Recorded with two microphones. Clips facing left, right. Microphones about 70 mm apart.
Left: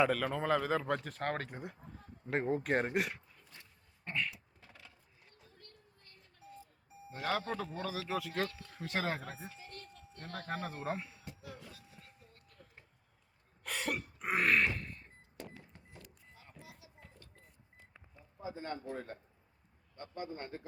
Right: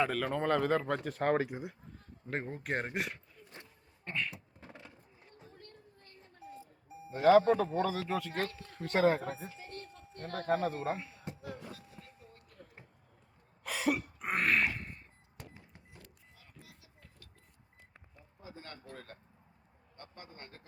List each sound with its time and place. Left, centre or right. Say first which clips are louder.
0.0 s speech: even; centre
4.0 s a sound: even; centre
4.3 s beatboxing: right 3 dB; right
7.2 s speech: right 13 dB; centre
7.6 s speech: right 9 dB; right
7.9 s speech: right 3 dB; centre
9.6 s a sound: right 4 dB; right
10.5 s speech: right 7 dB; centre
11.3 s music: right 6 dB; right
13.7 s throat clearing: right 5 dB; centre
14.8 s a sound: even; right
16.3 s a sound: left 3 dB; left
18.4 s a man's voice: left 8 dB; left